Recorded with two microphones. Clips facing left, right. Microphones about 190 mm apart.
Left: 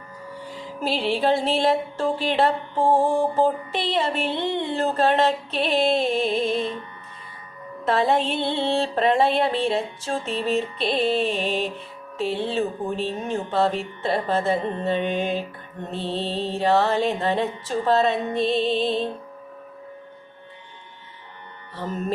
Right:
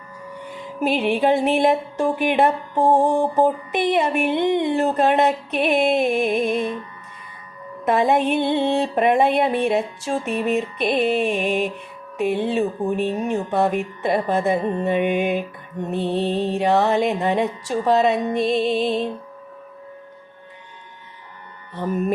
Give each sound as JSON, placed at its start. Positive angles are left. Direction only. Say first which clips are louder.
{"t": 0.8, "sound": "music", "louder": "right 4 dB", "side_deg": -15}
{"t": 7.9, "sound": "music", "louder": "right 3 dB", "side_deg": -15}
{"t": 21.8, "sound": "music", "louder": "right 6 dB", "side_deg": -15}